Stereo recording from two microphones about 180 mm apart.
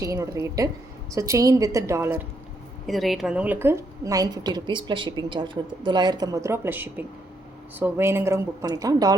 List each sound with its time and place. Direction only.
0.0 s a woman's voice: 15° right (ahead or behind)
2.8 s a woman's voice: centre (ahead or behind); by 9.1 s 20° right (ahead or behind)